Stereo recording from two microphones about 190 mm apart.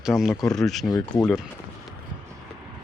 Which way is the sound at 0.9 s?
20° left (ahead or behind).